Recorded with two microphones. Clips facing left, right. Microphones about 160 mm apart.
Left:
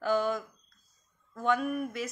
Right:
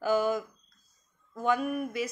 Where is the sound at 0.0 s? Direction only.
5° right (ahead or behind).